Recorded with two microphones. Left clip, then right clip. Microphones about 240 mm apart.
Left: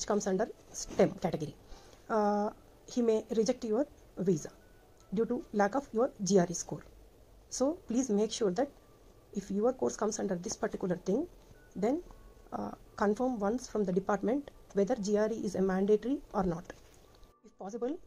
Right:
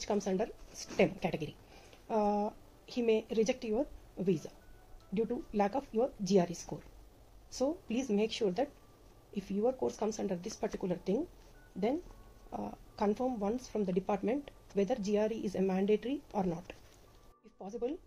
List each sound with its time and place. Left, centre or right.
0.0 s a woman's voice: left
12.4 s a woman's voice: left
17.6 s speech: left